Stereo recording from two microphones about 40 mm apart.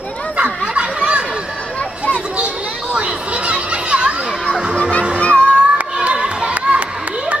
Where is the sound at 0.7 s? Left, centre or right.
Right.